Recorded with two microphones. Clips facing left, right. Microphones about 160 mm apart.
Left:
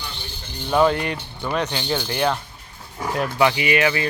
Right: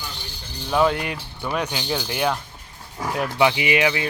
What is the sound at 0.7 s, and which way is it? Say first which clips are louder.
Speech: left 2 dB; centre (ahead or behind).